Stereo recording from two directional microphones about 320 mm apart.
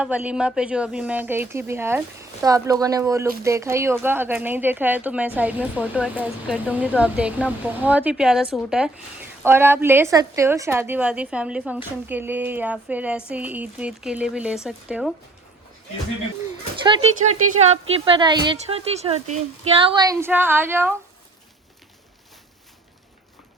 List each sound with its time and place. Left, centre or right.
0.0 s speech: centre
17.6 s a woman's voice: centre